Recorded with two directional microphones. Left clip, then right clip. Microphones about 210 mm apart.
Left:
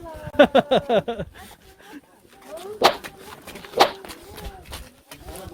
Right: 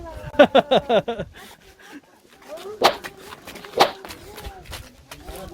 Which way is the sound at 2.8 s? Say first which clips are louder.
Even; centre (ahead or behind).